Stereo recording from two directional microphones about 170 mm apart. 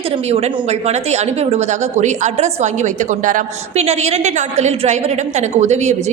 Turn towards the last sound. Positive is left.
turn(degrees=-40)  # may be behind; listen again after turning